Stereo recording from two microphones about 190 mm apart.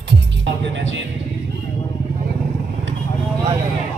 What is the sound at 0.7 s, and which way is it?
Speech, 75° right (ahead or behind).